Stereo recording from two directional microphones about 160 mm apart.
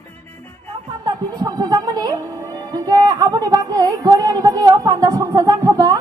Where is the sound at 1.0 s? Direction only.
25° right (ahead or behind).